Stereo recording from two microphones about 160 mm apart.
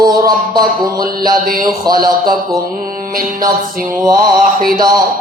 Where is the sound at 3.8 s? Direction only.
65° right (ahead or behind).